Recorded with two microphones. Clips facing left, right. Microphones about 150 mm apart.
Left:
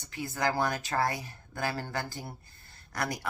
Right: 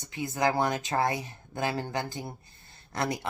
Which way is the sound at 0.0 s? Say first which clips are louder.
Right 3 dB; 20° right (ahead or behind).